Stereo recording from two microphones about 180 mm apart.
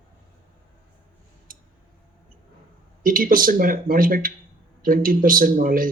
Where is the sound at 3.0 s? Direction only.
50° right (ahead or behind).